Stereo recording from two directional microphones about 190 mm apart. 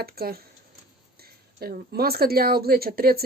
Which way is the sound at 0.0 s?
55° right (ahead or behind).